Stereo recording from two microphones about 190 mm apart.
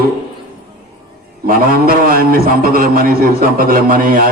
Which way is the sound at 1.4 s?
50° right (ahead or behind).